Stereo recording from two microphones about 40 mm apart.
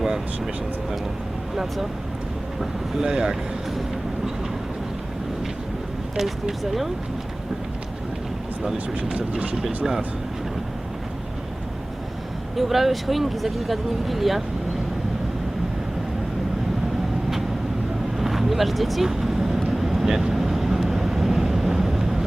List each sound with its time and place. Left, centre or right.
3.0 s speech: centre
6.7 s speech: centre
9.0 s speech: right
9.6 s speech: centre
12.5 s speech: centre
18.2 s vehicle: centre